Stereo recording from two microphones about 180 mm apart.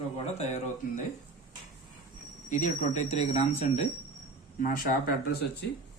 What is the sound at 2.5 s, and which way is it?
A man's voice, 45° left (ahead or behind).